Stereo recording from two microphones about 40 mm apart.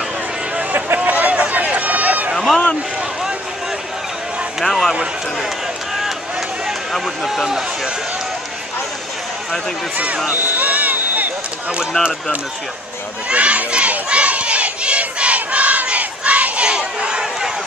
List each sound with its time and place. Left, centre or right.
0.7 s a sound: right
0.9 s run: right
2.3 s a sound: centre
4.6 s a man's voice: centre
6.9 s speech: centre
10.3 s a sound: right
13.3 s crowd: right
14.0 s battle cry: right
16.6 s crowd: right